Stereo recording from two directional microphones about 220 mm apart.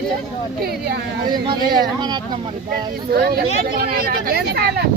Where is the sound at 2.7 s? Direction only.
45° right (ahead or behind).